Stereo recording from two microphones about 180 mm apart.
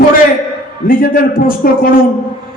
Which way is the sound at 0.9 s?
50° left (ahead or behind).